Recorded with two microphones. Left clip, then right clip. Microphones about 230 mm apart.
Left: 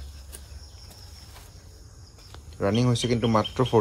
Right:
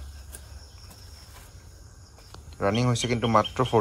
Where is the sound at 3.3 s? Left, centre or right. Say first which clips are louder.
Right 5 dB; centre.